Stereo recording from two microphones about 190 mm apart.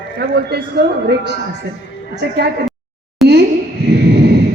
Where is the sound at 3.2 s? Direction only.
Centre (ahead or behind).